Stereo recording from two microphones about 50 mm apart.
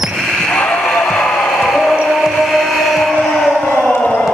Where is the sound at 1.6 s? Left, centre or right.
Centre.